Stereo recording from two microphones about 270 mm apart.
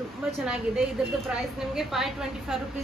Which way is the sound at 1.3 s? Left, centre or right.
Centre.